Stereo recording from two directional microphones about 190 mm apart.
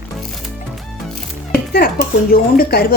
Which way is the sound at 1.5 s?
55° left (ahead or behind).